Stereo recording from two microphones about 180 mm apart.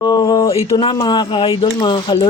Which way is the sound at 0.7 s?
25° left (ahead or behind).